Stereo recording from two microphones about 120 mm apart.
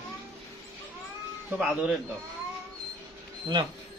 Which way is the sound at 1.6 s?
5° right (ahead or behind).